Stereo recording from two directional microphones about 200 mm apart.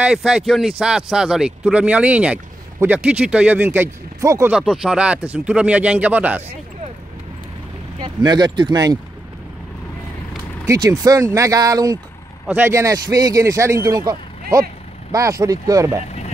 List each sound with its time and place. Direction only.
0.0 s speech: 5° right (ahead or behind)
4.5 s speech: 5° right (ahead or behind)
8.0 s speech: 20° right (ahead or behind)
10.7 s speech: 15° right (ahead or behind)